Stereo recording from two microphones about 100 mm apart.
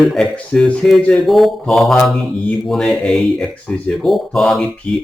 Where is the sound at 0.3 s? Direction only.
10° left (ahead or behind).